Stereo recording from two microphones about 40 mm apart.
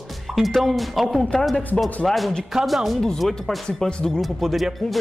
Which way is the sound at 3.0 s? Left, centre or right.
Centre.